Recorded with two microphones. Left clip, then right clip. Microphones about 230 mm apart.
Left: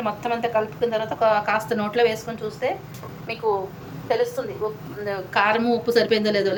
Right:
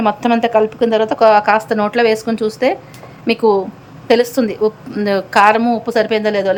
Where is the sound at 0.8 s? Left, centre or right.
Right.